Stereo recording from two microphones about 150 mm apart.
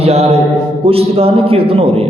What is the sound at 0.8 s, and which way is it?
Speech, 40° right (ahead or behind).